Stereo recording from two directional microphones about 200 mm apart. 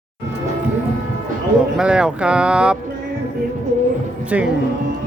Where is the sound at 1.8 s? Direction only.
5° right (ahead or behind).